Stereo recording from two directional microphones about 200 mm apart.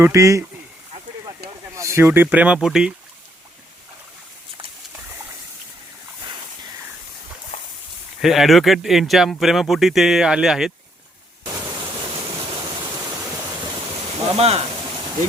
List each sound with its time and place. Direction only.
0.0 s speech: 15° right (ahead or behind)
1.7 s speech: 15° right (ahead or behind)
7.5 s a sound: 35° left (ahead or behind)
8.2 s speech: centre (ahead or behind)
14.3 s speech: 30° right (ahead or behind)